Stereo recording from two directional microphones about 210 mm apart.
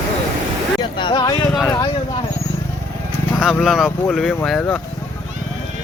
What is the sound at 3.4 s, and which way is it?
Speech, centre (ahead or behind).